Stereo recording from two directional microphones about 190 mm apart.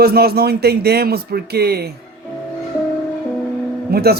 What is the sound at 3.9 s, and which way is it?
Speech, 55° right (ahead or behind).